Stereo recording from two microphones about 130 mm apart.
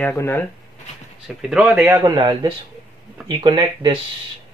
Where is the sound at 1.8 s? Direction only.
30° right (ahead or behind).